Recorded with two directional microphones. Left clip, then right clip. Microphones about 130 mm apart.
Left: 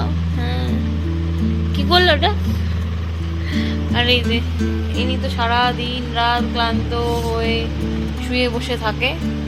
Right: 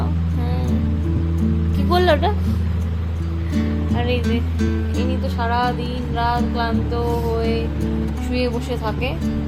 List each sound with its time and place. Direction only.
1.7 s music: 15° right (ahead or behind)
3.5 s music: centre (ahead or behind)